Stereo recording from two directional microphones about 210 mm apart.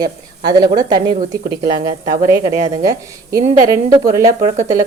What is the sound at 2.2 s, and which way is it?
A woman's voice, 15° right (ahead or behind).